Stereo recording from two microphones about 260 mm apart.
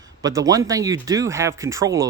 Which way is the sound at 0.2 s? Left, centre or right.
Centre.